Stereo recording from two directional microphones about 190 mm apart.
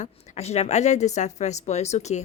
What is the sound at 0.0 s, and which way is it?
Speech, 35° left (ahead or behind).